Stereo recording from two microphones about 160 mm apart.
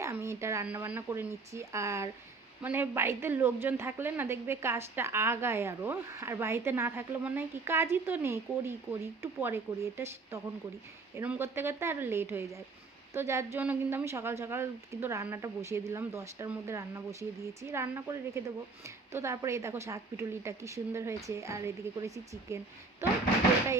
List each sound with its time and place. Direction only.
0.0 s a woman's voice: 15° right (ahead or behind)